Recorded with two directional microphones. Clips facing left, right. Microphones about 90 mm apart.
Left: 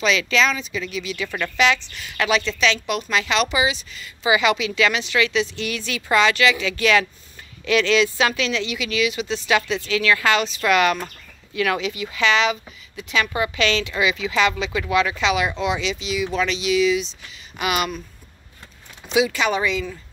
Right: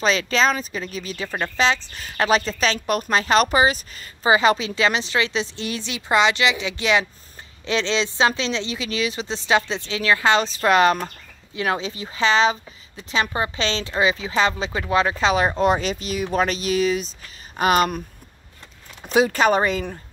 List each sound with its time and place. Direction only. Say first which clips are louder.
0.0 s a woman's voice: even; 35° right (ahead or behind)
19.0 s speech: right 3 dB; 45° right (ahead or behind)